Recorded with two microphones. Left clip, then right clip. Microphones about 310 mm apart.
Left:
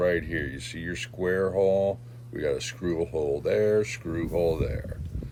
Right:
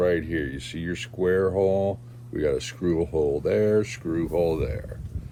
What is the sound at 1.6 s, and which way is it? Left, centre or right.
Speech, right.